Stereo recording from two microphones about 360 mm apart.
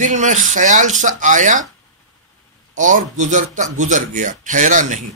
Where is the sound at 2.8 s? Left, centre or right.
Right.